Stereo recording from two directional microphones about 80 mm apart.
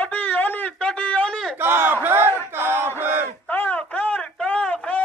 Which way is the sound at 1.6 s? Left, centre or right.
Right.